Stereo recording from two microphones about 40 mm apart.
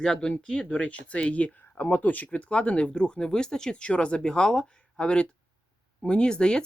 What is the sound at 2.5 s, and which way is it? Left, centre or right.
Speech, left.